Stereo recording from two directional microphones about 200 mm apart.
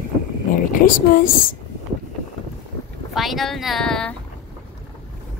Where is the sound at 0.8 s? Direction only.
45° left (ahead or behind).